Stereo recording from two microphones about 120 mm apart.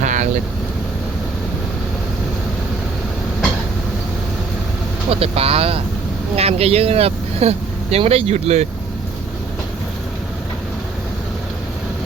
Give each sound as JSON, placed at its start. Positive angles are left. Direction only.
{"t": 0.0, "sound": "vehicle", "side_deg": -90}
{"t": 5.2, "sound": "speech", "side_deg": -55}